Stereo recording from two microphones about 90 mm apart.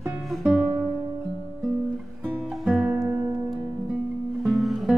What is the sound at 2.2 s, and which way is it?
Music, 15° right (ahead or behind).